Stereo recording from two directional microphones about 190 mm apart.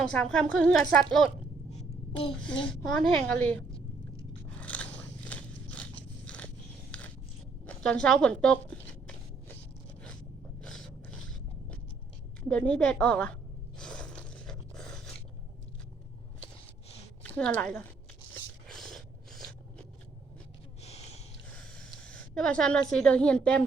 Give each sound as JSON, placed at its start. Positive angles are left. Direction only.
{"t": 0.0, "sound": "a woman's voice", "side_deg": 5}
{"t": 2.4, "sound": "a woman's voice", "side_deg": 5}
{"t": 4.5, "sound": "biting", "side_deg": 5}
{"t": 7.6, "sound": "speech", "side_deg": 5}
{"t": 10.6, "sound": "a sound", "side_deg": 5}
{"t": 12.5, "sound": "a woman's voice", "side_deg": 5}
{"t": 13.7, "sound": "gasp", "side_deg": 5}
{"t": 17.2, "sound": "a woman's voice", "side_deg": 10}
{"t": 18.3, "sound": "scrape", "side_deg": 0}
{"t": 20.8, "sound": "a sound", "side_deg": 35}
{"t": 21.5, "sound": "a sound", "side_deg": 5}
{"t": 22.9, "sound": "a woman's voice", "side_deg": 5}